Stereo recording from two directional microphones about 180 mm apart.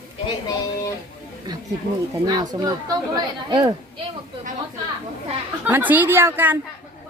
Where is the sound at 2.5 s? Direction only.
20° right (ahead or behind).